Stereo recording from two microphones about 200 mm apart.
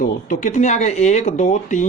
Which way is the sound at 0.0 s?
40° left (ahead or behind).